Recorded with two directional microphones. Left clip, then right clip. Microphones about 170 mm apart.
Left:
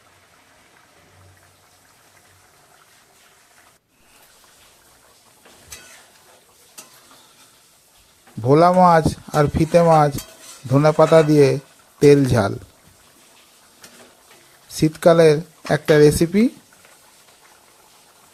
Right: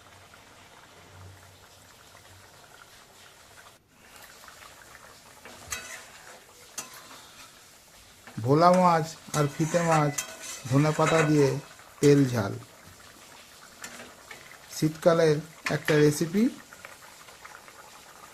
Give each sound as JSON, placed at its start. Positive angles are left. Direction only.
{"t": 8.4, "sound": "speech", "side_deg": 40}
{"t": 14.8, "sound": "speech", "side_deg": 45}